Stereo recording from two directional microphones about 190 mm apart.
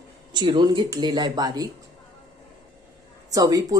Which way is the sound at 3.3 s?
20° right (ahead or behind).